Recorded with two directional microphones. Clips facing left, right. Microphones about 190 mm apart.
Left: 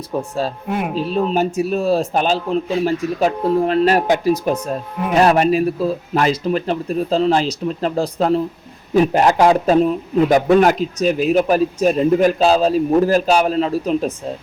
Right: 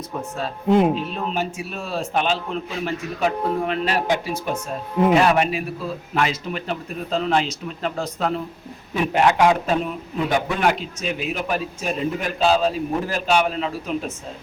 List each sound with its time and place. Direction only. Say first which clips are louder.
0.2 s a man's voice: left 6 dB; 35° left (ahead or behind)